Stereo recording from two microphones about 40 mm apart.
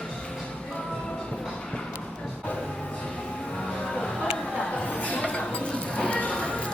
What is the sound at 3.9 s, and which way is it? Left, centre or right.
Music, left.